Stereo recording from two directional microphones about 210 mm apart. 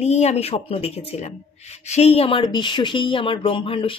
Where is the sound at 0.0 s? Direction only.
30° left (ahead or behind).